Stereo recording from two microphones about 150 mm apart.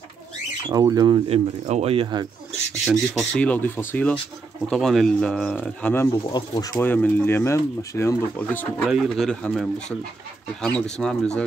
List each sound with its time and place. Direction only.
0.7 s speech: 25° right (ahead or behind)
2.9 s speech: 5° left (ahead or behind)
6.2 s speech: 30° left (ahead or behind)
6.8 s speech: 10° left (ahead or behind)
8.8 s speech: 5° right (ahead or behind)